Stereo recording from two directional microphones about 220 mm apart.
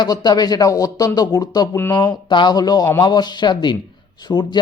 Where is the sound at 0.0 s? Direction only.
20° left (ahead or behind).